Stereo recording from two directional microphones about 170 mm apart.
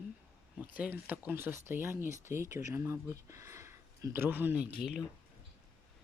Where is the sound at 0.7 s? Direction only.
10° right (ahead or behind).